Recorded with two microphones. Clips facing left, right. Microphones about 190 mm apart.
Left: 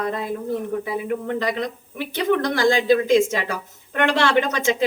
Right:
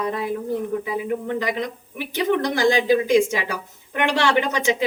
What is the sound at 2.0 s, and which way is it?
A woman's voice, 15° right (ahead or behind).